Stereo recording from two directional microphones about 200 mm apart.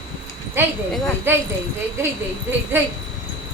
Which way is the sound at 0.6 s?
10° right (ahead or behind).